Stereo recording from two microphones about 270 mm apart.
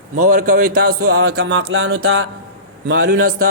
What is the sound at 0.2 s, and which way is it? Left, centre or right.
Speech, right.